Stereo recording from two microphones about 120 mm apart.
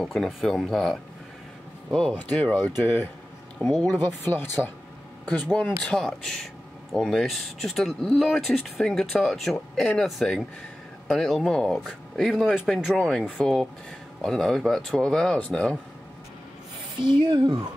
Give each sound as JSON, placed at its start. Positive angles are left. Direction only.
{"t": 0.0, "sound": "speech", "side_deg": 0}
{"t": 2.8, "sound": "speech", "side_deg": 20}
{"t": 3.5, "sound": "speech", "side_deg": 0}
{"t": 3.9, "sound": "speech", "side_deg": 15}
{"t": 17.0, "sound": "speech", "side_deg": -40}